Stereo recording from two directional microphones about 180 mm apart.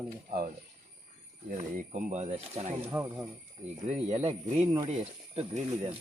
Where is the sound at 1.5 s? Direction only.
45° right (ahead or behind).